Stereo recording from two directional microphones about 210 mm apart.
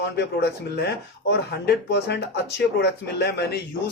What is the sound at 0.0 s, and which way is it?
Speech, 55° left (ahead or behind).